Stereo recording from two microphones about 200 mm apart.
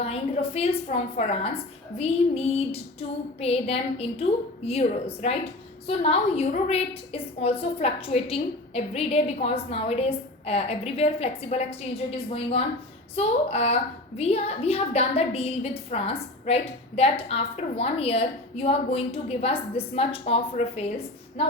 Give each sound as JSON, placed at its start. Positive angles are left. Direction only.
{"t": 0.0, "sound": "a woman's voice", "side_deg": 30}